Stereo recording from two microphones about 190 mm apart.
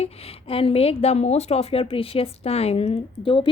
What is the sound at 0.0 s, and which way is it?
A woman's voice, 30° left (ahead or behind).